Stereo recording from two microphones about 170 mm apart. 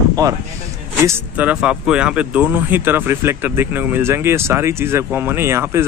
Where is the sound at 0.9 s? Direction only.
15° right (ahead or behind).